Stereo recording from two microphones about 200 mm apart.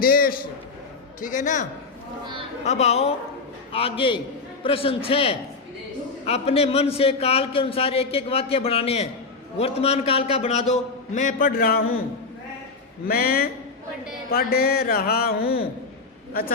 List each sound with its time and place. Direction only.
0.0 s a man's voice: 45° left (ahead or behind)
2.6 s a man's voice: 35° left (ahead or behind)
13.1 s speech: 50° left (ahead or behind)